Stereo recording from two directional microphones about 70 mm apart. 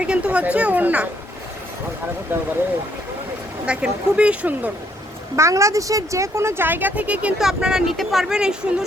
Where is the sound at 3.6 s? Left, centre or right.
Centre.